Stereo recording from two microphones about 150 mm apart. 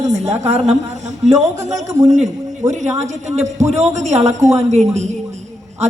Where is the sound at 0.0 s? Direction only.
45° right (ahead or behind).